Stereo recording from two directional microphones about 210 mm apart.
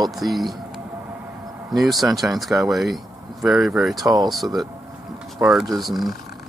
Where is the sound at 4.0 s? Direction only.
20° right (ahead or behind).